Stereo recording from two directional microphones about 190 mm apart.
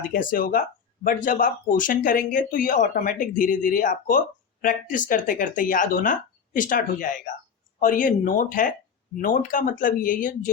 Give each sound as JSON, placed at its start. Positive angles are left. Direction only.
{"t": 0.1, "sound": "speech", "side_deg": 45}